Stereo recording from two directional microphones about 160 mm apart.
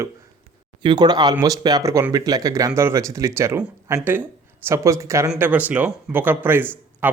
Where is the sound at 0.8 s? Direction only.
25° right (ahead or behind).